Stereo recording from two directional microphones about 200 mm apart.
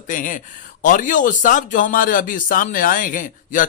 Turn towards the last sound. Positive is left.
turn(degrees=40)  # may be behind; listen again after turning